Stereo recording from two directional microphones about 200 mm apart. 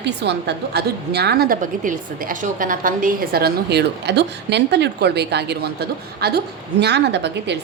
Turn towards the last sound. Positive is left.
turn(degrees=-60)  # may be behind; listen again after turning